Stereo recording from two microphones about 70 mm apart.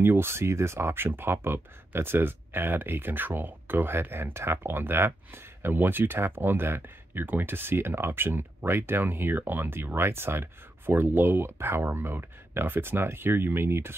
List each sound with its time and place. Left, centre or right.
0.0 s speech: right